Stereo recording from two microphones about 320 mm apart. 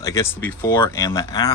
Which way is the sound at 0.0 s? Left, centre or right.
Centre.